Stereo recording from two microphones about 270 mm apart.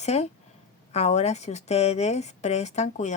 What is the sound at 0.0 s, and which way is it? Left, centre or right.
Speech, left.